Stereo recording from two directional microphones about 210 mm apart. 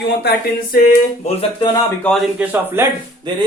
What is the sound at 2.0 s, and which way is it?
Speech, centre (ahead or behind).